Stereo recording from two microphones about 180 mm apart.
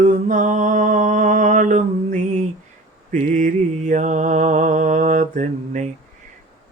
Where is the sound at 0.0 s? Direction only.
45° right (ahead or behind).